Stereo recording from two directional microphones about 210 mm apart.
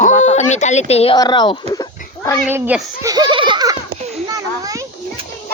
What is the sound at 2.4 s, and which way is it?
A child's voice, 10° right (ahead or behind).